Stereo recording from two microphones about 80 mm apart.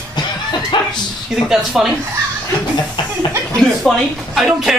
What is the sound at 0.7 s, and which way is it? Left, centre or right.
Dog, left.